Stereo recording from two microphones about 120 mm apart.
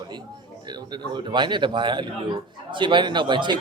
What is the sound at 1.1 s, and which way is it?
Speech, 40° right (ahead or behind).